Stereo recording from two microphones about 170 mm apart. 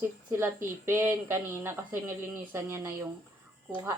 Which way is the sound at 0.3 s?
15° right (ahead or behind).